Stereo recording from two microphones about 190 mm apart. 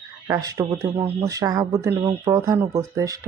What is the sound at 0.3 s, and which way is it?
Speech, 20° right (ahead or behind).